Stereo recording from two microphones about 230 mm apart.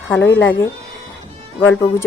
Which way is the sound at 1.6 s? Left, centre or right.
Centre.